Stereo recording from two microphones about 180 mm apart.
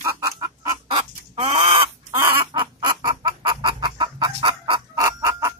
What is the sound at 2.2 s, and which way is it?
Chicken, 20° right (ahead or behind).